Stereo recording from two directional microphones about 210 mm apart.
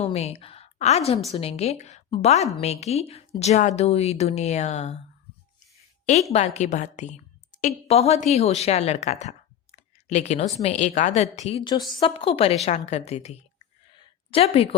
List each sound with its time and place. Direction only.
0.0 s a woman's voice: 30° left (ahead or behind)
6.3 s a woman's voice: 30° left (ahead or behind)